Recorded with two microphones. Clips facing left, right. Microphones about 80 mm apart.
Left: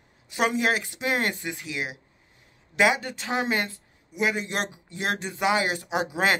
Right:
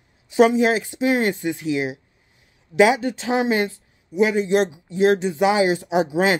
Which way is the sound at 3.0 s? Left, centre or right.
Right.